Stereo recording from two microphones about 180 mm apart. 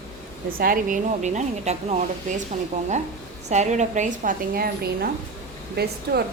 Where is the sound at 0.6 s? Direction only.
50° right (ahead or behind).